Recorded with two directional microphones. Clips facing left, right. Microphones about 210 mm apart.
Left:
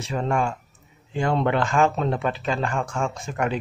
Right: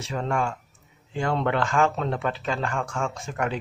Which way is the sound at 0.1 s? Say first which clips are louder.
Left 3 dB; 20° left (ahead or behind).